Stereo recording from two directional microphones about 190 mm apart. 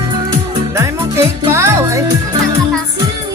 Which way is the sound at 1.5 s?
15° right (ahead or behind).